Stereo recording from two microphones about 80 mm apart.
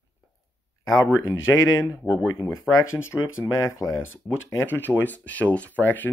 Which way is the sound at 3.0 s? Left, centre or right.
Left.